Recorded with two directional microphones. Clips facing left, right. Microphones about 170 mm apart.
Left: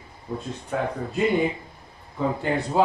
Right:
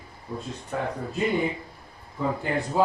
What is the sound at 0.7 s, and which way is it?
Speech, 70° left (ahead or behind).